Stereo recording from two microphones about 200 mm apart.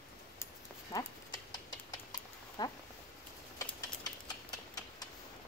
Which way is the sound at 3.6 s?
20° left (ahead or behind).